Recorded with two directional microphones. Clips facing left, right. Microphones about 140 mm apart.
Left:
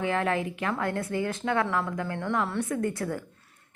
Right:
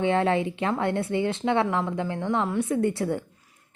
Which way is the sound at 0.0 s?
30° right (ahead or behind).